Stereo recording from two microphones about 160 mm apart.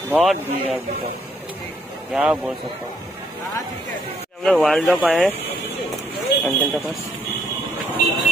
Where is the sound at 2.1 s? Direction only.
5° right (ahead or behind).